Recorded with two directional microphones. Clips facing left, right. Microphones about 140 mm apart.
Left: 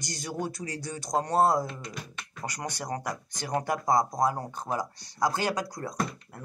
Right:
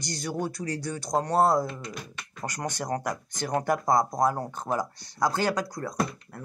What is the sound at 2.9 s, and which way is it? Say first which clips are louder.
Speech: right 3 dB; 45° right (ahead or behind).